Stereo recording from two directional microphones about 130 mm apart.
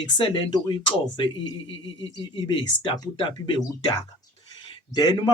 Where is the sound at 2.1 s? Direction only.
40° left (ahead or behind).